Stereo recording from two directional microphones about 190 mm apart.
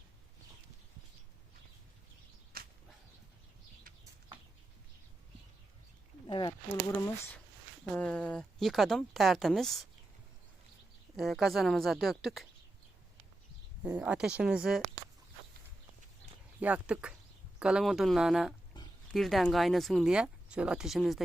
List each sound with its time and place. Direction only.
6.2 s a sound: 25° left (ahead or behind)
7.9 s speech: 5° left (ahead or behind)
11.2 s speech: centre (ahead or behind)
13.8 s speech: 5° right (ahead or behind)
16.6 s speech: 5° right (ahead or behind)